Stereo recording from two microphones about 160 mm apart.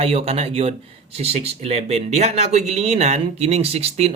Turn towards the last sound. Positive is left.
turn(degrees=-40)  # may be behind; listen again after turning